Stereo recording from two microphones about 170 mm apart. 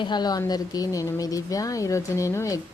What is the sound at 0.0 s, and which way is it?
Speech, 25° left (ahead or behind).